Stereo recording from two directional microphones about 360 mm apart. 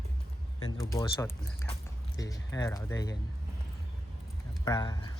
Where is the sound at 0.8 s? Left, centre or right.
Centre.